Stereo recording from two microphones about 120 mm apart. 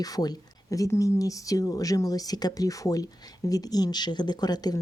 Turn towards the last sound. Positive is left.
turn(degrees=35)  # may be behind; listen again after turning